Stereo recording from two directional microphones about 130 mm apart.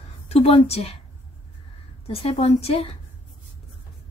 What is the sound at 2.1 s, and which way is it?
Speech, 50° left (ahead or behind).